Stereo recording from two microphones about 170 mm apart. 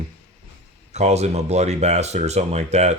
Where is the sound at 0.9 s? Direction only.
40° right (ahead or behind).